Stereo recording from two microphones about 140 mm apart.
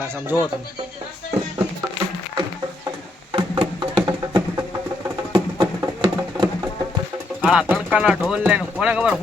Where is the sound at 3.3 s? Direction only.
35° right (ahead or behind).